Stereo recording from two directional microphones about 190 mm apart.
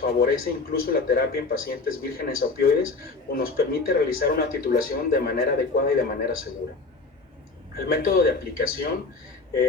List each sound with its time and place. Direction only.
0.0 s speech: 55° left (ahead or behind)
7.8 s speech: 55° left (ahead or behind)